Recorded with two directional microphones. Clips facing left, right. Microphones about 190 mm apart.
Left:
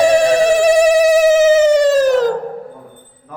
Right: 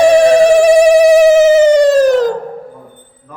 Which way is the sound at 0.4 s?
5° left (ahead or behind).